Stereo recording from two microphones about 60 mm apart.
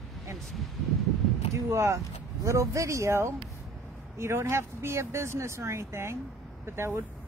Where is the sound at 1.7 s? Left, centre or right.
Right.